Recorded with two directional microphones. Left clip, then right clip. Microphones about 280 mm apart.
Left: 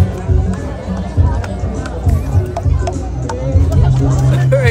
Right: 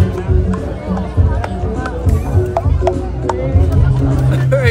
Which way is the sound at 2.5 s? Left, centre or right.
Right.